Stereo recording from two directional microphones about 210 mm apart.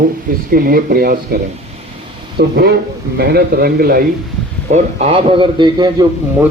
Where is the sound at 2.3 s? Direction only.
50° right (ahead or behind).